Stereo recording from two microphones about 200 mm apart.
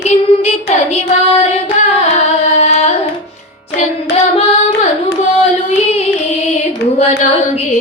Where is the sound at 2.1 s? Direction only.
35° left (ahead or behind).